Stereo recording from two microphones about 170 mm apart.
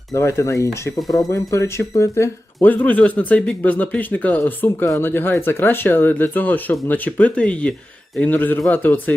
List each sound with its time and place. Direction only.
0.1 s speech: 15° left (ahead or behind)